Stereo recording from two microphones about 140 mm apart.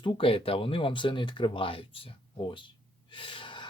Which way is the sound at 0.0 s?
35° left (ahead or behind).